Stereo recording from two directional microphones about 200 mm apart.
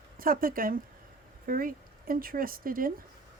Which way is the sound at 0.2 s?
45° right (ahead or behind).